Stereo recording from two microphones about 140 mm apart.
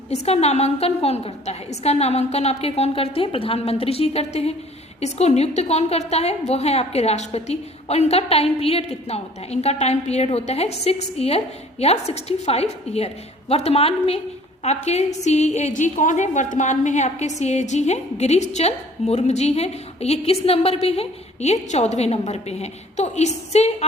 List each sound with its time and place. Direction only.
0.1 s a woman's voice: 50° left (ahead or behind)